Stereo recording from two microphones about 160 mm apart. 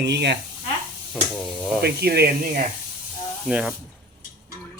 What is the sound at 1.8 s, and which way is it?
Speech, 85° right.